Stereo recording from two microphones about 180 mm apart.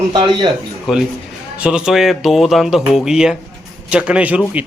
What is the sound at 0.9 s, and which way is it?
A man's voice, centre (ahead or behind).